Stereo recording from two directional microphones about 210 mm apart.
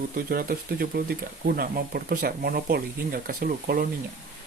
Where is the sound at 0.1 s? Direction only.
45° right (ahead or behind).